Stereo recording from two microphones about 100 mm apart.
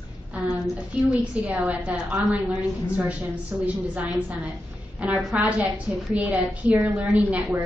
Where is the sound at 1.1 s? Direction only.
10° right (ahead or behind).